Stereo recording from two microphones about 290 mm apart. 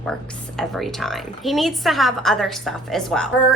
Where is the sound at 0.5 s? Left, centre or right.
Centre.